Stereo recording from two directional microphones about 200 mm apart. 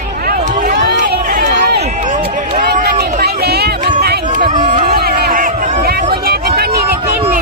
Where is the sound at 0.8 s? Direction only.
55° right (ahead or behind).